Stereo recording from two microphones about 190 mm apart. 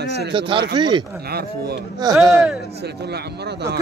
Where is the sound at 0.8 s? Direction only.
25° right (ahead or behind).